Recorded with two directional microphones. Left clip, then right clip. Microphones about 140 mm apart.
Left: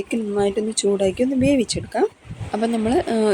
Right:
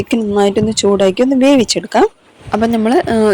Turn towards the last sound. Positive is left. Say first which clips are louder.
# right 7 dB
turn(degrees=-50)  # may be behind; listen again after turning